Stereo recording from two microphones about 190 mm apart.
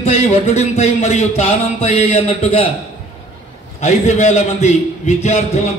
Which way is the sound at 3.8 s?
35° left (ahead or behind).